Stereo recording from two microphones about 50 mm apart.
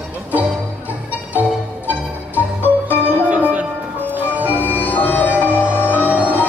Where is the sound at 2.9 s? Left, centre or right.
Right.